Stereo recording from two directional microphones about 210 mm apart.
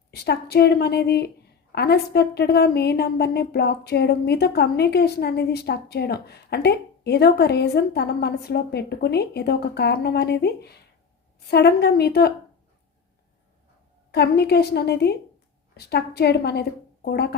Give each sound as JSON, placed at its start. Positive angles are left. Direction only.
{"t": 0.1, "sound": "a woman's voice", "side_deg": 50}
{"t": 14.1, "sound": "a woman's voice", "side_deg": 50}